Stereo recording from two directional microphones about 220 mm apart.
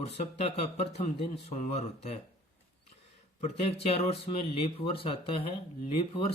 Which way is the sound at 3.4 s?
30° left (ahead or behind).